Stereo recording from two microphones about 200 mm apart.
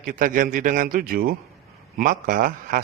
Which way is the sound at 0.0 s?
45° right (ahead or behind).